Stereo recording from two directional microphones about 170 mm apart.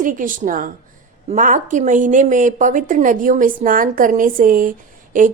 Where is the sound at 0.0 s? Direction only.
50° right (ahead or behind).